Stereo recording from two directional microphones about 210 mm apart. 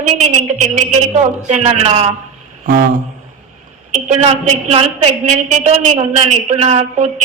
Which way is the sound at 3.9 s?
35° right (ahead or behind).